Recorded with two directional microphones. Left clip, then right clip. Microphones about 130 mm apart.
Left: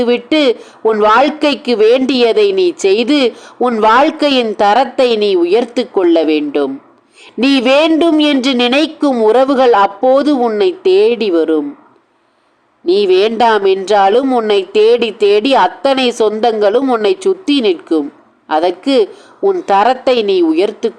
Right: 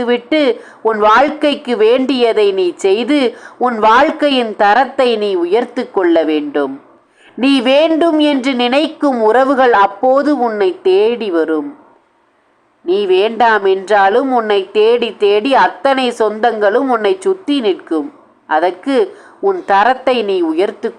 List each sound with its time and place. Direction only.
0.0 s a woman's voice: 25° left (ahead or behind)
12.9 s speech: 35° left (ahead or behind)
13.3 s a woman's voice: 25° left (ahead or behind)